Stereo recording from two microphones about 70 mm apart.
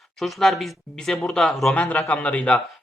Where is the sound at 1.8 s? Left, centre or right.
Left.